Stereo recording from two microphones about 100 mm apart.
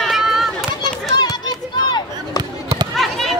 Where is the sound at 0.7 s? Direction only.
45° left (ahead or behind).